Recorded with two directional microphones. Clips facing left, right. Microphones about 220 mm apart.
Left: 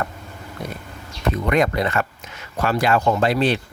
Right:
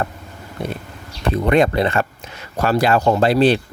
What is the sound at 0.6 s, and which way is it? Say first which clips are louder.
Speech: right 6 dB; 30° right (ahead or behind).